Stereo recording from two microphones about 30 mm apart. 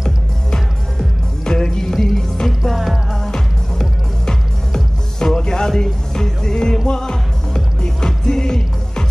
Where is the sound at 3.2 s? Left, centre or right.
Left.